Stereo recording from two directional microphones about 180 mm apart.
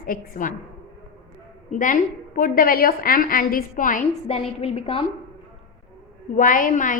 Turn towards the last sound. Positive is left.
turn(degrees=45)  # may be behind; listen again after turning